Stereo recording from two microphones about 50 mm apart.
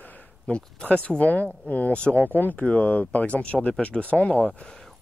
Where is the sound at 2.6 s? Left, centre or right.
Left.